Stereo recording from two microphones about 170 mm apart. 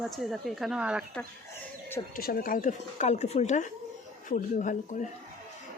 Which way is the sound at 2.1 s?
60° left (ahead or behind).